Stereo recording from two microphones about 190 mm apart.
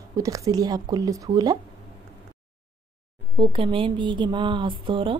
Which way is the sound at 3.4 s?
25° right (ahead or behind).